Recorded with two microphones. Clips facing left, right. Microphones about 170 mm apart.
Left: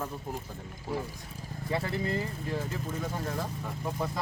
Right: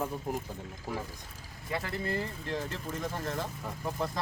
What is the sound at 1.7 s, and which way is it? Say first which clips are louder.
Speech: left 2 dB; 25° left (ahead or behind).